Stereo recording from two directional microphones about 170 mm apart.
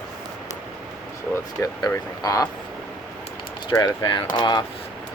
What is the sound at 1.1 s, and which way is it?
Speech, 15° left (ahead or behind).